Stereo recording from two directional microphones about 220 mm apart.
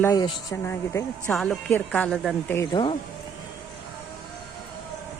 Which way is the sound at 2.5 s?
20° left (ahead or behind).